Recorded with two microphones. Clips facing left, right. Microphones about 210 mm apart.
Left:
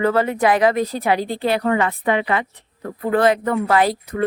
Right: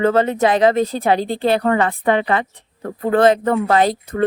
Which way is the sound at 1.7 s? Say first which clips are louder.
Right 2 dB; 40° right (ahead or behind).